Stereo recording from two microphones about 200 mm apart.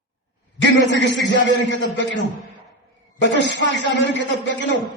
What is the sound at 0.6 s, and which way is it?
A man's voice, 60° left (ahead or behind).